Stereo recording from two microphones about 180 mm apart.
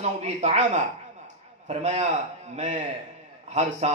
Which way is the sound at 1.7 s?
40° right (ahead or behind).